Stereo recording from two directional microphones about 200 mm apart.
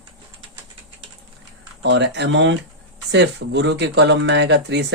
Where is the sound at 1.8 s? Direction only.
60° right (ahead or behind).